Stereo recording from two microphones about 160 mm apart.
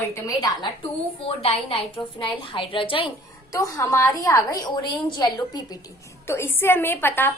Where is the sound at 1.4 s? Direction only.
35° left (ahead or behind).